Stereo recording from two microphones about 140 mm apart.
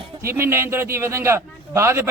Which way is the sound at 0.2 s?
15° right (ahead or behind).